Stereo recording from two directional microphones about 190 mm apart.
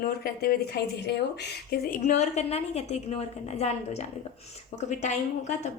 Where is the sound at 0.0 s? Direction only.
50° left (ahead or behind).